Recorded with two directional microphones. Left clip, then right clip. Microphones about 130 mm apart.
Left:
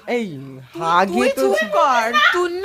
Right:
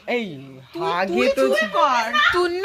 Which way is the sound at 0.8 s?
45° left (ahead or behind).